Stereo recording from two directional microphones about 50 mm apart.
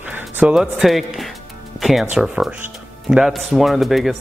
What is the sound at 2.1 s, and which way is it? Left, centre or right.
Speech, centre.